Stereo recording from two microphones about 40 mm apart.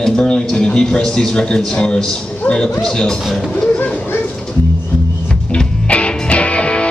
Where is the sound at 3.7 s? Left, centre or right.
Left.